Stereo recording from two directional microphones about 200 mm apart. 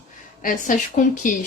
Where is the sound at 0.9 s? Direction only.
40° left (ahead or behind).